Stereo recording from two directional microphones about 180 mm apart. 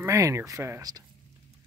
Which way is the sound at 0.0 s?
15° right (ahead or behind).